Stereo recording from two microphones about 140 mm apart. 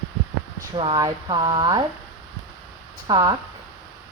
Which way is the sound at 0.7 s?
35° right (ahead or behind).